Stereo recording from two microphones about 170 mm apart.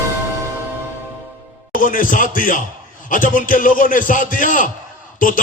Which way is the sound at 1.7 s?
50° left (ahead or behind).